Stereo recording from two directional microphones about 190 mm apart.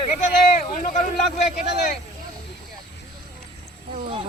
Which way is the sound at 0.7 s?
45° left (ahead or behind).